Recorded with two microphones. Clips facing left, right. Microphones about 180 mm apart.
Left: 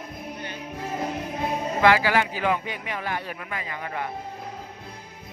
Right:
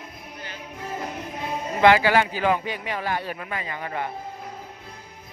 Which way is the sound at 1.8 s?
25° right (ahead or behind).